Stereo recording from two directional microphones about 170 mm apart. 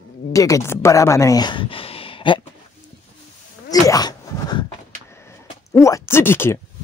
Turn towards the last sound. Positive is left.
turn(degrees=15)  # may be behind; listen again after turning